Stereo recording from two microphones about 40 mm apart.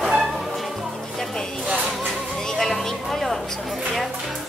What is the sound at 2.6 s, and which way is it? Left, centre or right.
Speech, centre.